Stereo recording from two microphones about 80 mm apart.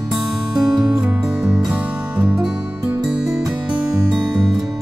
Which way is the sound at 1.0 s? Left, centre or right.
Centre.